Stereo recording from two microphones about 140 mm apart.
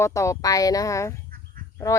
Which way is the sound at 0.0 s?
20° left (ahead or behind).